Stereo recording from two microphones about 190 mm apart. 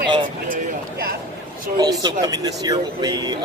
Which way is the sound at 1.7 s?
20° right (ahead or behind).